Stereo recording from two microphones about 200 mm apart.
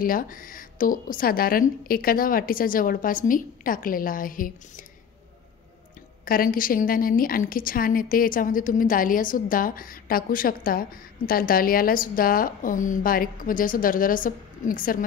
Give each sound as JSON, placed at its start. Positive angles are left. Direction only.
{"t": 0.0, "sound": "a woman's voice", "side_deg": 45}
{"t": 6.2, "sound": "a woman's voice", "side_deg": 45}